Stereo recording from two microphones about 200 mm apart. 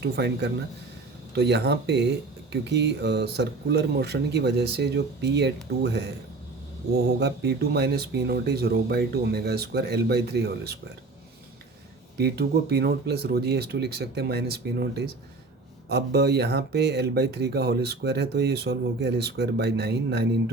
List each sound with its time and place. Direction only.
0.0 s speech: 55° right (ahead or behind)
7.2 s speech: 55° right (ahead or behind)
12.1 s speech: 55° right (ahead or behind)